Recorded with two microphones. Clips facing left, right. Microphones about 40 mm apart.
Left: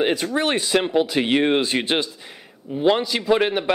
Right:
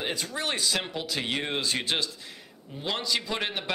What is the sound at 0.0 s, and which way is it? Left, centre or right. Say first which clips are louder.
A man's voice: left 11 dB; left.